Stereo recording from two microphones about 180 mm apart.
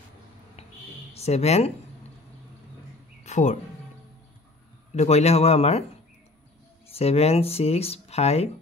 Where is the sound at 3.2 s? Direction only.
40° left (ahead or behind).